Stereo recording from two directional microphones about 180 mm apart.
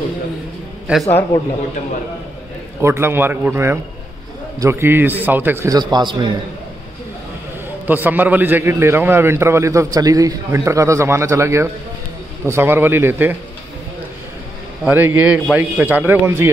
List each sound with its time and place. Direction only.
1.0 s speech: 15° left (ahead or behind)
2.8 s a man's voice: 15° right (ahead or behind)
7.8 s a man's voice: 10° right (ahead or behind)
14.9 s a man's voice: 10° right (ahead or behind)